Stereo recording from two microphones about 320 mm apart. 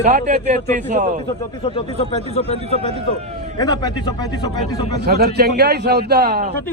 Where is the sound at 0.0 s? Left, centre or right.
Right.